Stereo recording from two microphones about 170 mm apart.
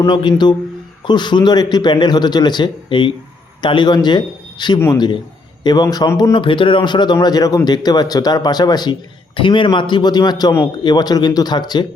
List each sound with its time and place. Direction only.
0.0 s speech: 25° left (ahead or behind)